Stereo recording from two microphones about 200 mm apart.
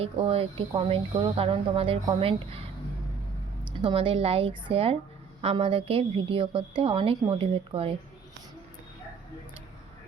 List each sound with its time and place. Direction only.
0.0 s a woman's voice: 30° right (ahead or behind)